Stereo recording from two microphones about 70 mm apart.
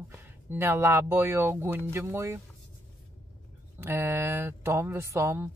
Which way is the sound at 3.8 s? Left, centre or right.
Right.